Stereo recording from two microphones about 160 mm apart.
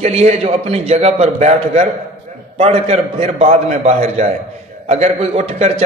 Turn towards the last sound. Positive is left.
turn(degrees=-40)  # may be behind; listen again after turning